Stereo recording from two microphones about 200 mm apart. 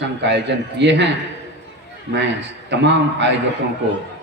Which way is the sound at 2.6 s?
60° right (ahead or behind).